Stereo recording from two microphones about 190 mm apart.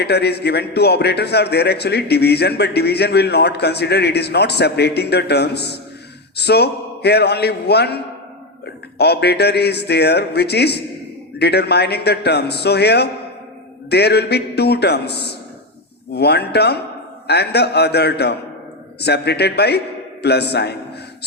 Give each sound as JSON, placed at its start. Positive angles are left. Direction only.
{"t": 0.0, "sound": "a man's voice", "side_deg": 60}